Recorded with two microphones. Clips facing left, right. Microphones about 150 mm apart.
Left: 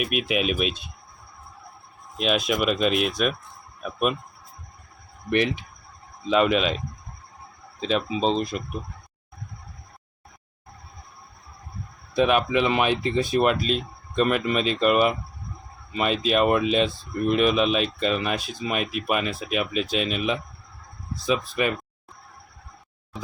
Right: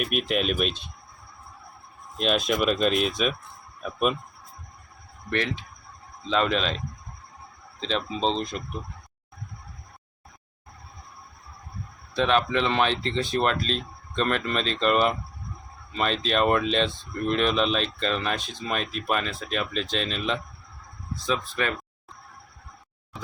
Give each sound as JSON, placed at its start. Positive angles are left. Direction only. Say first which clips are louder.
{"t": 0.0, "sound": "speech", "louder": "left 1 dB", "side_deg": 5}
{"t": 2.1, "sound": "speech", "louder": "left 1 dB", "side_deg": 5}
{"t": 5.3, "sound": "speech", "louder": "left 5 dB", "side_deg": 15}
{"t": 12.1, "sound": "speech", "louder": "left 2 dB", "side_deg": 10}